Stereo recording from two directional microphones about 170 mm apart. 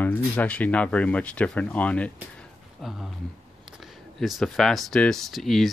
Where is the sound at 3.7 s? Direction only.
Centre (ahead or behind).